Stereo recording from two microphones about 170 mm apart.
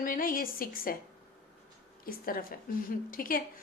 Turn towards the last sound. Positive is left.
turn(degrees=55)  # may be behind; listen again after turning